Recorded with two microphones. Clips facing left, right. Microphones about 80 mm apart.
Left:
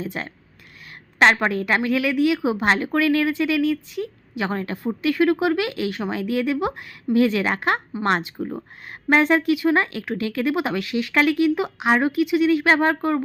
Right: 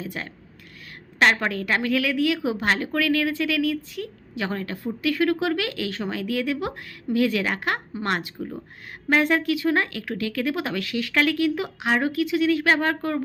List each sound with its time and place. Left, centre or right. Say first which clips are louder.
0.0 s speech: left 3 dB; left
8.4 s speech: left 4 dB; left
9.0 s speech: left 3 dB; left